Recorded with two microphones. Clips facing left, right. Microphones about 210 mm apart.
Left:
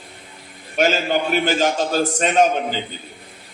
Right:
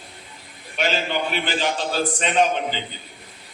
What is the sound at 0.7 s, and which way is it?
A man's voice, 45° left (ahead or behind).